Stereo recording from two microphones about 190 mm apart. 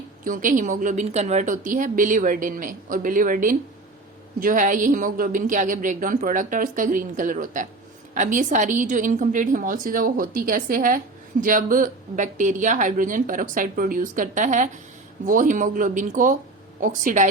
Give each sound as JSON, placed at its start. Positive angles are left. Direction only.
{"t": 0.3, "sound": "a woman's voice", "side_deg": -45}